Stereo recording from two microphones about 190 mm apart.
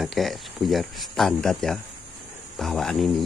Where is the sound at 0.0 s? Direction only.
Centre (ahead or behind).